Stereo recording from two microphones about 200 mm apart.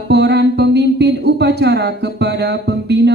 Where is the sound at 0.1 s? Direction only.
55° right (ahead or behind).